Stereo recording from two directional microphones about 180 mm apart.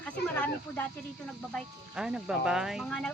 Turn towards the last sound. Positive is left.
turn(degrees=0)  # may be behind; listen again after turning